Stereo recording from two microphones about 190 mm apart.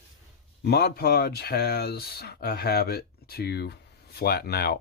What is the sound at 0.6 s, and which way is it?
Speech, 60° left (ahead or behind).